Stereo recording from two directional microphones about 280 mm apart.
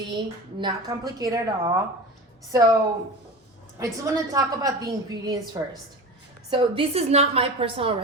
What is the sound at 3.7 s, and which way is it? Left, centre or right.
A woman's voice, centre.